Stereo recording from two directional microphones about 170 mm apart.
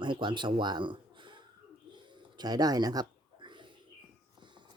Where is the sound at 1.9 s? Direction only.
25° right (ahead or behind).